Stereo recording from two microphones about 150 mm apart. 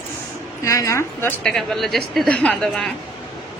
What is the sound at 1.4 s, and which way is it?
A woman's voice, 5° left (ahead or behind).